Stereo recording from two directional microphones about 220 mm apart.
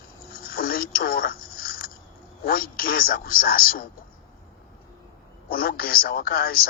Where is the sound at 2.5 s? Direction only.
40° left (ahead or behind).